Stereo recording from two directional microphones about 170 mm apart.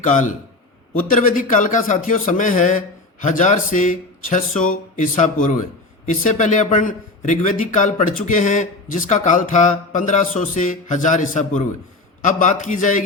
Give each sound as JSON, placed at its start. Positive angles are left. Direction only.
{"t": 0.0, "sound": "speech", "side_deg": 50}